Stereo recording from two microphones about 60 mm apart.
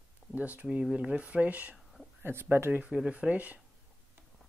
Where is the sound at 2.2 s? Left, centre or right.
Right.